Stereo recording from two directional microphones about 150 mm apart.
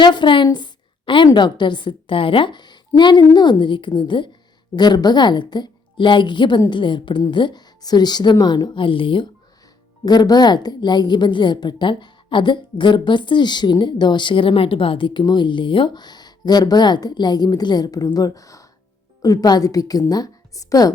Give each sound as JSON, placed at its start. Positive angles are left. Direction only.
{"t": 0.0, "sound": "a woman's voice", "side_deg": 30}